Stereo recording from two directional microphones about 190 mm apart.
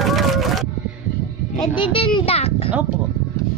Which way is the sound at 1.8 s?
30° left (ahead or behind).